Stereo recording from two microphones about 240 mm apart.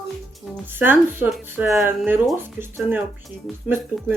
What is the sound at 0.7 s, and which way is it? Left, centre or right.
Speech, centre.